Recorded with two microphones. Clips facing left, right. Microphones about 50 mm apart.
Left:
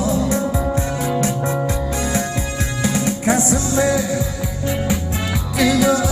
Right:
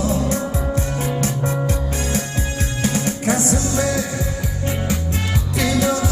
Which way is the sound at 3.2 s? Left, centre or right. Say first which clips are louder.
Left 2 dB; left.